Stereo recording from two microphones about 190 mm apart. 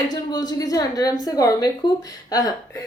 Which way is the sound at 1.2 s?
20° left (ahead or behind).